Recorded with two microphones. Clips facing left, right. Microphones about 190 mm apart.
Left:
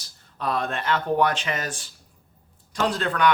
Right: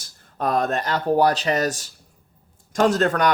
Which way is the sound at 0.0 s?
45° right (ahead or behind).